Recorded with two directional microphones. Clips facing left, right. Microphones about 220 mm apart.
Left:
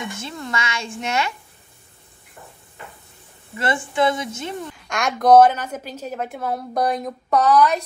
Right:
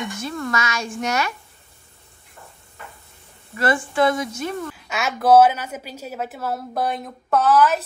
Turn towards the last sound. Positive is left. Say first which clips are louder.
# left 1 dB
turn(degrees=-5)  # may be behind; listen again after turning